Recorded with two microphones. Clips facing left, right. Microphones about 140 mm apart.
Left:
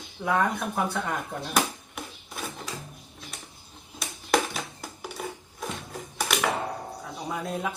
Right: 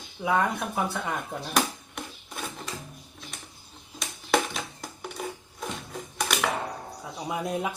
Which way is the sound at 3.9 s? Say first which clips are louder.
Even; centre (ahead or behind).